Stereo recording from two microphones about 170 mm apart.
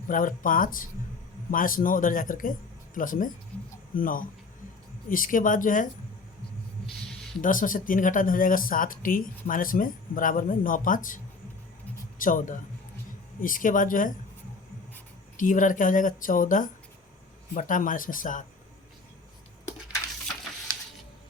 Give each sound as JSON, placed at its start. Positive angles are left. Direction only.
{"t": 0.1, "sound": "speech", "side_deg": 50}
{"t": 7.4, "sound": "speech", "side_deg": 50}
{"t": 12.2, "sound": "speech", "side_deg": 50}
{"t": 15.4, "sound": "speech", "side_deg": 50}